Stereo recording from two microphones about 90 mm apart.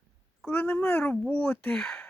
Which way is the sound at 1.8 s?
5° left (ahead or behind).